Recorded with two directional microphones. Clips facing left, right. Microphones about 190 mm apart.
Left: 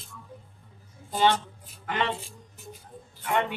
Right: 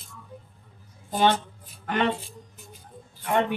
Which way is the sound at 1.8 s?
50° right (ahead or behind).